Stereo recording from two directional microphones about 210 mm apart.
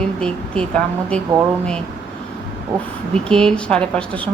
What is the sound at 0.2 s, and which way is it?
Speech, 5° left (ahead or behind).